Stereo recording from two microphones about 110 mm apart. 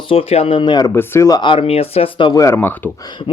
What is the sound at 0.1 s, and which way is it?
Speech, 60° left (ahead or behind).